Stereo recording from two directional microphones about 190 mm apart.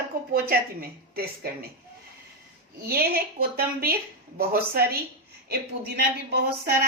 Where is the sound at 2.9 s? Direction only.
55° right (ahead or behind).